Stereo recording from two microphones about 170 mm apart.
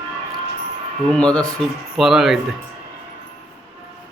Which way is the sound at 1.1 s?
5° left (ahead or behind).